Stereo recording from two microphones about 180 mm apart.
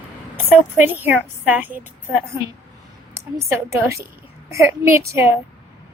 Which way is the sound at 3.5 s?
15° right (ahead or behind).